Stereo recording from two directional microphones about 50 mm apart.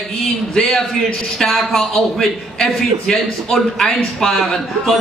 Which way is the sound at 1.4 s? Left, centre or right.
Centre.